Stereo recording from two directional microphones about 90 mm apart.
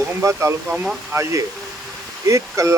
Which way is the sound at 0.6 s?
15° right (ahead or behind).